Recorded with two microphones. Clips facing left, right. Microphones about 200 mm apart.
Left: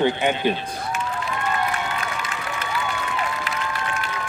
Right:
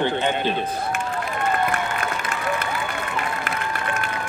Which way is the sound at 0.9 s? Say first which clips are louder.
Right 1 dB; 55° right (ahead or behind).